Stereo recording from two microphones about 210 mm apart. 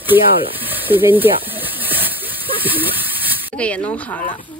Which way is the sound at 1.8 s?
10° right (ahead or behind).